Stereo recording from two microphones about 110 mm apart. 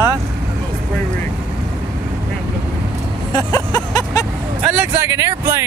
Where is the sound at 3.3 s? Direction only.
35° left (ahead or behind).